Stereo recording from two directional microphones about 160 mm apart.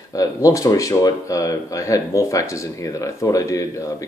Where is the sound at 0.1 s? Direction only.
20° left (ahead or behind).